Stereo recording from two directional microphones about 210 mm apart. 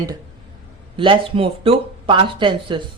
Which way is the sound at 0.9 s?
25° right (ahead or behind).